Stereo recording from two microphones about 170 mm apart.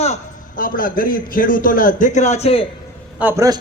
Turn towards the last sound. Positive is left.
turn(degrees=-15)  # may be behind; listen again after turning